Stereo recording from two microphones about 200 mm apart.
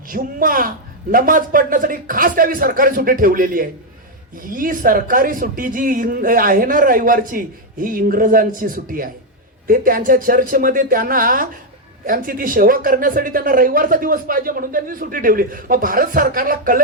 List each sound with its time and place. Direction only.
0.1 s speech: 45° right (ahead or behind)